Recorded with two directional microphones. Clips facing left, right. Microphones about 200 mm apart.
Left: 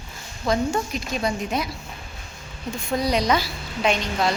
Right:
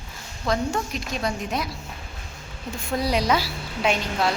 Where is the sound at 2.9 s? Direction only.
5° right (ahead or behind).